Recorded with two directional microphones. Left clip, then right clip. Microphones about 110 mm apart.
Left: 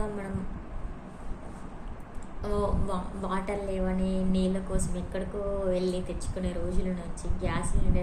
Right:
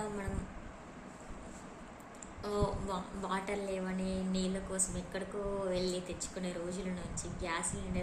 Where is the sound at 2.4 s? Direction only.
10° right (ahead or behind).